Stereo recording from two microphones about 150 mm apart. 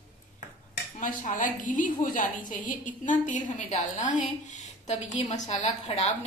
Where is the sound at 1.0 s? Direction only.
60° left (ahead or behind).